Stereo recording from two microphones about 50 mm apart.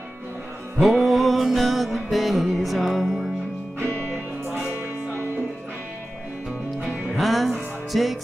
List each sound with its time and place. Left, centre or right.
0.7 s music: centre
7.2 s music: centre